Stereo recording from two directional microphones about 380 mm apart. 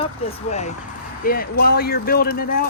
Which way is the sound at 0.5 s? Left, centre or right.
Centre.